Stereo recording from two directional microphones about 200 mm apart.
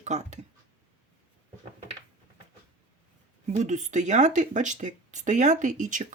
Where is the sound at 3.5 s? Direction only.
35° right (ahead or behind).